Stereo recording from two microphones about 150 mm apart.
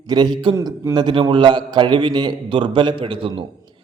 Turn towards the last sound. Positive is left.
turn(degrees=-35)  # may be behind; listen again after turning